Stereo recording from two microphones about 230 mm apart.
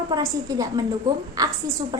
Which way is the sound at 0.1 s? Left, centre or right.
Centre.